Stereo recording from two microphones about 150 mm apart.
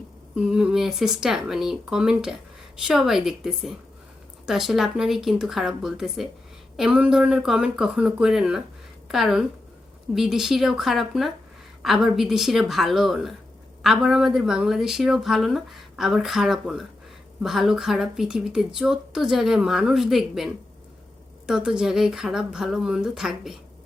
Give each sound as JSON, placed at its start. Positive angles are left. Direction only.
{"t": 0.3, "sound": "a woman's voice", "side_deg": -5}